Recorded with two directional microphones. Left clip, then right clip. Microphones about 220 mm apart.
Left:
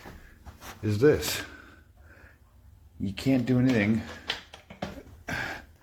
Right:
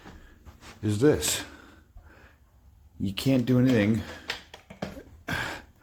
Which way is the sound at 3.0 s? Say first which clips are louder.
Right 1 dB; 30° right (ahead or behind).